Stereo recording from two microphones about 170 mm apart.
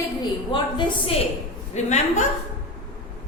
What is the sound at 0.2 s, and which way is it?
Speech, 30° left (ahead or behind).